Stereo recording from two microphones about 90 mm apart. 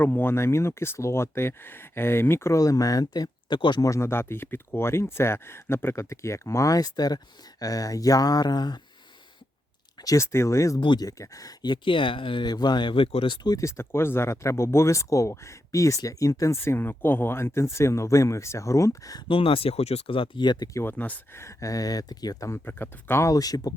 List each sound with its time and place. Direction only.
0.0 s speech: 25° left (ahead or behind); by 3.8 s 60° left (ahead or behind)
3.8 s speech: 35° left (ahead or behind); by 8.8 s 50° left (ahead or behind)
10.0 s speech: 35° left (ahead or behind)
10.8 s speech: 60° left (ahead or behind)
11.0 s speech: 40° left (ahead or behind); by 13.5 s 70° left (ahead or behind)
13.5 s speech: 35° left (ahead or behind)
16.6 s speech: 25° left (ahead or behind)
19.3 s speech: 90° left; by 20.7 s 55° left (ahead or behind)
20.9 s speech: 15° left (ahead or behind)
21.3 s speech: 35° left (ahead or behind)
22.5 s speech: 25° left (ahead or behind)
23.3 s speech: 45° left (ahead or behind)